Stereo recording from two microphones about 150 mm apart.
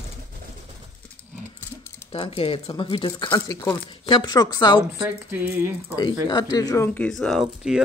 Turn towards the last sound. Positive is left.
turn(degrees=-5)  # may be behind; listen again after turning